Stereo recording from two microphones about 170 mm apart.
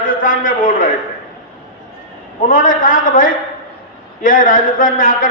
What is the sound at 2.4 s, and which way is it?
A man's voice, 50° left (ahead or behind).